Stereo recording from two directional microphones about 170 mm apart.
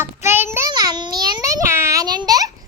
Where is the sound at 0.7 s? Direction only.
25° right (ahead or behind).